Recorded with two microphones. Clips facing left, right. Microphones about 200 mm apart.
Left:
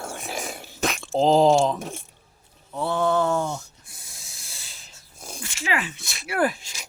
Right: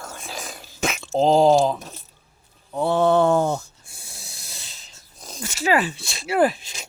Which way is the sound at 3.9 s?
30° right (ahead or behind).